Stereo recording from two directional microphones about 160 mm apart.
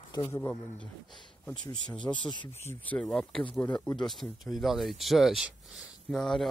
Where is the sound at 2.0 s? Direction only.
15° left (ahead or behind).